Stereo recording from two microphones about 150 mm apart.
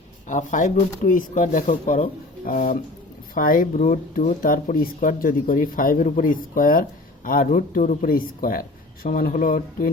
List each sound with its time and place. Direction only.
0.3 s speech: 55° left (ahead or behind)